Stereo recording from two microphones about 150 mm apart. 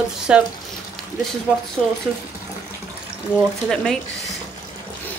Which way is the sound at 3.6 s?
Centre (ahead or behind).